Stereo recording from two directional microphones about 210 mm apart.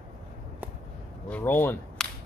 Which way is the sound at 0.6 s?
10° right (ahead or behind).